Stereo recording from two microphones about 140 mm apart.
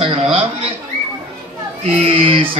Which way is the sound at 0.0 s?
40° right (ahead or behind).